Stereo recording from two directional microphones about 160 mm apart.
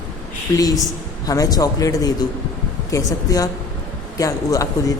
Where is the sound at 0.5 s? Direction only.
25° left (ahead or behind).